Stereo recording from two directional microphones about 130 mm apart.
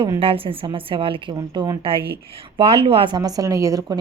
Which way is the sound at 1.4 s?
30° right (ahead or behind).